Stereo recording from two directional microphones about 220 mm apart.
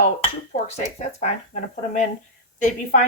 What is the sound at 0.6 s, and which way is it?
Speech, 30° left (ahead or behind).